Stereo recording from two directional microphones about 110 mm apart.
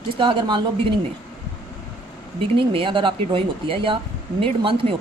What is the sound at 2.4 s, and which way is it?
Speech, 55° right (ahead or behind).